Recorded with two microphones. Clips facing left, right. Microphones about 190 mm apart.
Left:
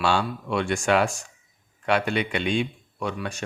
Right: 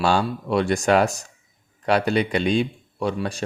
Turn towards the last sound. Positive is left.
turn(degrees=-35)  # may be behind; listen again after turning